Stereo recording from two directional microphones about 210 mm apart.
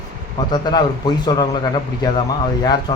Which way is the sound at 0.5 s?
20° left (ahead or behind).